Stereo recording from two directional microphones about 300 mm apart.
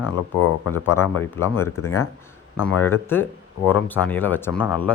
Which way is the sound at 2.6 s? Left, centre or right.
Left.